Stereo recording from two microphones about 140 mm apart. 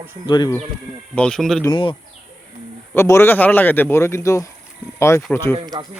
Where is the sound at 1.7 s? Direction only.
40° left (ahead or behind).